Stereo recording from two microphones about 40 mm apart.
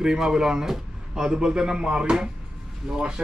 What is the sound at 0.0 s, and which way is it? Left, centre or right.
Speech, centre.